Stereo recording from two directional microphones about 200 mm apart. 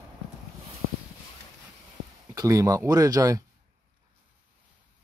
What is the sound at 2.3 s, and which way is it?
Speech, 20° right (ahead or behind).